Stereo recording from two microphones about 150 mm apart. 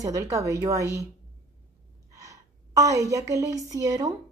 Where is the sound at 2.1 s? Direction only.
20° right (ahead or behind).